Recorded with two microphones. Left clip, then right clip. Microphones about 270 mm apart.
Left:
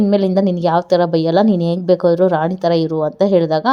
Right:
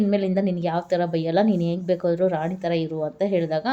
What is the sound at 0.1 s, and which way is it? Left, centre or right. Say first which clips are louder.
Speech: left 8 dB; left.